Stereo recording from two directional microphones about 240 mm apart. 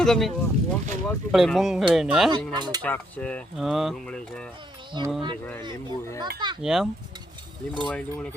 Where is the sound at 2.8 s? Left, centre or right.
Centre.